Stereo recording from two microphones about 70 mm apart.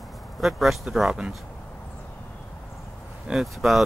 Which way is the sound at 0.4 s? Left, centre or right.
Centre.